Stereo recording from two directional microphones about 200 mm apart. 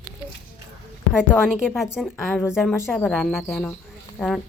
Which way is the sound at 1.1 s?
5° right (ahead or behind).